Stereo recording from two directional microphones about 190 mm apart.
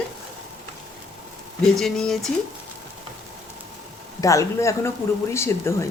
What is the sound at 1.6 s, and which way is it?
Speech, centre (ahead or behind).